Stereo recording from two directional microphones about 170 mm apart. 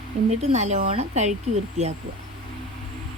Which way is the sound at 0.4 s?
40° right (ahead or behind).